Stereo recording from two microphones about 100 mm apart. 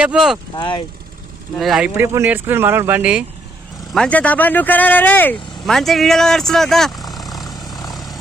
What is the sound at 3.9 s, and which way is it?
Speech, 10° left (ahead or behind).